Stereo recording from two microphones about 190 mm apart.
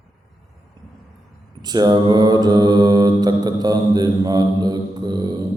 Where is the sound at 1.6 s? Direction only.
20° right (ahead or behind).